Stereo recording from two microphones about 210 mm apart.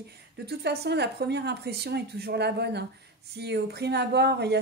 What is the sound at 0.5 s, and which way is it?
Speech, 50° right (ahead or behind).